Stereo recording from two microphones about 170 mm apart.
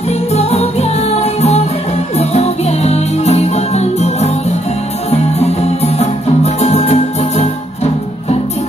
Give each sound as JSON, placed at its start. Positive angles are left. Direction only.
{"t": 0.1, "sound": "music", "side_deg": 40}